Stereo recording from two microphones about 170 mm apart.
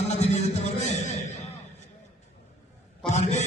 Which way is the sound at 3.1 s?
45° left (ahead or behind).